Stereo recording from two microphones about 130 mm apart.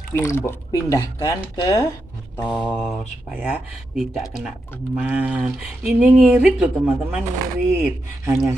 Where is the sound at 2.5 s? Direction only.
10° left (ahead or behind).